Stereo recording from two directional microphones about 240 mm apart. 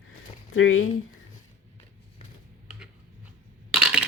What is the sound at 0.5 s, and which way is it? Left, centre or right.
Speech, left.